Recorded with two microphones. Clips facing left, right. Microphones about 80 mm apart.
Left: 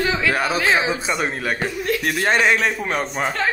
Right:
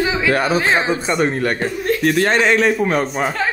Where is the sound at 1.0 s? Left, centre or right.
Centre.